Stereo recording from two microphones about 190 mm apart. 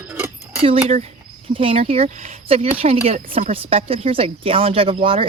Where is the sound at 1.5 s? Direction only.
30° right (ahead or behind).